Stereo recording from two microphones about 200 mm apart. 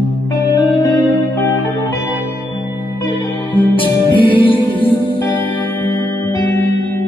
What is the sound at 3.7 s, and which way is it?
Music, 25° left (ahead or behind).